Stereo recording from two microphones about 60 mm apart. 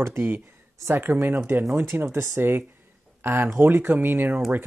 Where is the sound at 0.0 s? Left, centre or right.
Right.